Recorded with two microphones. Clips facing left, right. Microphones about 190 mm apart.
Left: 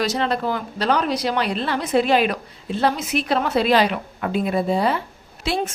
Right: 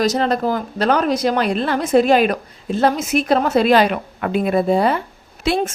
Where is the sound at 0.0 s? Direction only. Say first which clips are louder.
Right 4 dB; 40° right (ahead or behind).